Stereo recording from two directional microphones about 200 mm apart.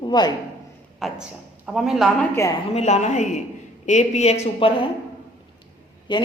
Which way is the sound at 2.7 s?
35° left (ahead or behind).